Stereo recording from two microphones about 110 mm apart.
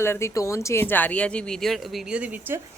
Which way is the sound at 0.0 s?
25° left (ahead or behind).